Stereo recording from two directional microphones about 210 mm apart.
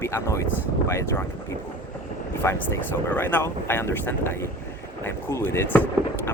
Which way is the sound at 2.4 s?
10° left (ahead or behind).